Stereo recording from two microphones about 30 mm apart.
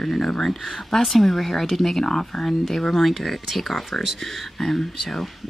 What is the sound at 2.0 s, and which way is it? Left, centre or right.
Speech, centre.